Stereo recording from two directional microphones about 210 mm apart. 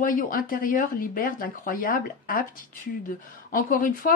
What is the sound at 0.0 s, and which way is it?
Speech, 40° left (ahead or behind).